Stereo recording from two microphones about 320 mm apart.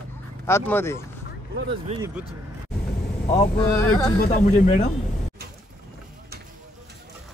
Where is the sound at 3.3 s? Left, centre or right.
Left.